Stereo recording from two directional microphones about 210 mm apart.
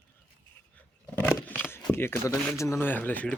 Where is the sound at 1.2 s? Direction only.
5° left (ahead or behind).